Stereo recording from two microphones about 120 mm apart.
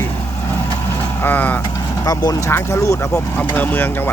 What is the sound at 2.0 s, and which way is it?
Speech, 30° left (ahead or behind).